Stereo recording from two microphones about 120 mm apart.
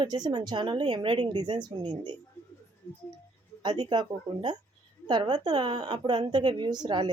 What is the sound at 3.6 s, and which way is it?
A woman's voice, 40° right (ahead or behind).